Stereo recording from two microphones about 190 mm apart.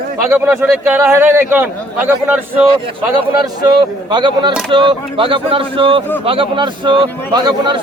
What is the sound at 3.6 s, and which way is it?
Speech, 25° right (ahead or behind).